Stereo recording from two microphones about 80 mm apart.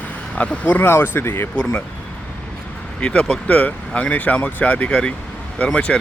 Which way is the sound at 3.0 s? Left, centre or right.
Centre.